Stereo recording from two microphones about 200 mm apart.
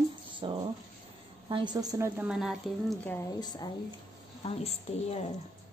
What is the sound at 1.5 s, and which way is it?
A woman's voice, 20° right (ahead or behind).